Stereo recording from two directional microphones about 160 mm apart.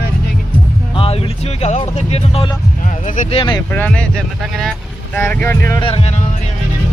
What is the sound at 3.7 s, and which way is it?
Speech, 10° left (ahead or behind).